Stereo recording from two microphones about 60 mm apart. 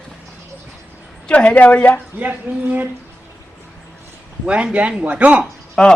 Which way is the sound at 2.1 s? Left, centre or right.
Right.